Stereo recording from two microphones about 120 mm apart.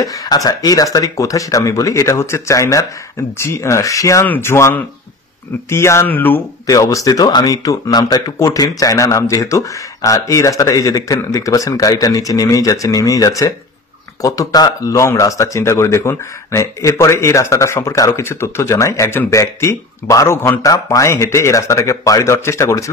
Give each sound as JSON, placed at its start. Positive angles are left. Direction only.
{"t": 0.0, "sound": "speech", "side_deg": 30}
{"t": 6.6, "sound": "speech", "side_deg": 30}